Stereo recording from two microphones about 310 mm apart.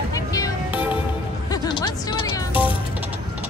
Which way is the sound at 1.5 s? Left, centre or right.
Centre.